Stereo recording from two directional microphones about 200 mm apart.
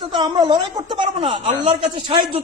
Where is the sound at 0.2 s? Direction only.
20° right (ahead or behind).